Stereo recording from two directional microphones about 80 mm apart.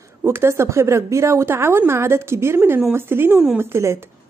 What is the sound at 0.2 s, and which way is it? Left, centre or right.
A woman's voice, right.